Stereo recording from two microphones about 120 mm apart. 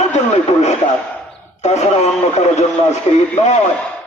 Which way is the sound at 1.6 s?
65° left (ahead or behind).